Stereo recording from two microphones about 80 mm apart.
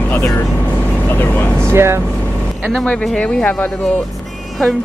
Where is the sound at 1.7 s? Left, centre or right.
Right.